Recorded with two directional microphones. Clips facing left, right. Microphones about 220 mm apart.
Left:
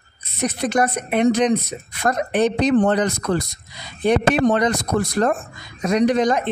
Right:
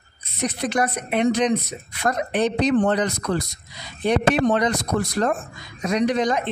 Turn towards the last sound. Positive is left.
turn(degrees=50)  # may be behind; listen again after turning